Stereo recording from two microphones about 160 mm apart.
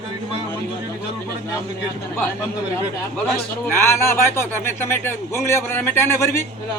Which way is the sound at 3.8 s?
15° left (ahead or behind).